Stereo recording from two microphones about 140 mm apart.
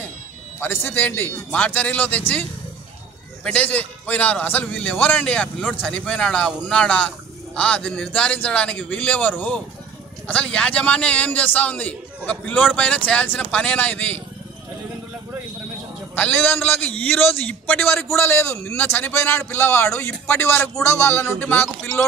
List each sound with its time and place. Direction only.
0.6 s speech: 15° left (ahead or behind)
3.4 s speech: 10° left (ahead or behind)
16.2 s speech: 10° left (ahead or behind)
18.1 s speech: 15° left (ahead or behind)